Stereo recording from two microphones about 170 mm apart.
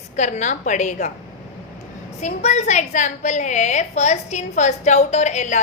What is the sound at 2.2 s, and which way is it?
A woman's voice, 45° left (ahead or behind).